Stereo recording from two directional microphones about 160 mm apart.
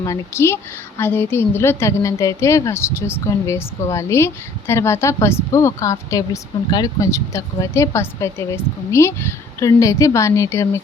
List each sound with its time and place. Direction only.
0.0 s a woman's voice: 20° left (ahead or behind)